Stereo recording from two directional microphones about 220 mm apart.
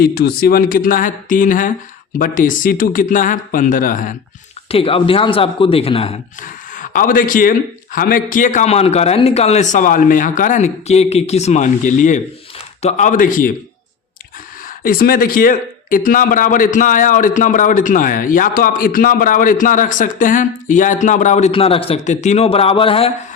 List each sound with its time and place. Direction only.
0.0 s speech: 45° left (ahead or behind)
4.7 s a man's voice: 25° left (ahead or behind)
14.8 s speech: 40° left (ahead or behind); by 23.1 s 25° left (ahead or behind)